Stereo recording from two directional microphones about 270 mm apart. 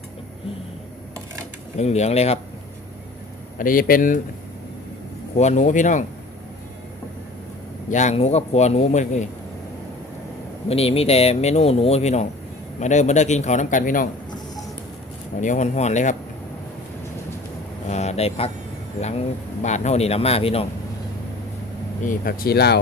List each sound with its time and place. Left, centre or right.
1.8 s speech: left
3.6 s speech: left
5.4 s speech: left
7.9 s speech: left
10.7 s speech: left
15.4 s speech: left
17.8 s a sound: left
19.6 s speech: left
22.0 s speech: left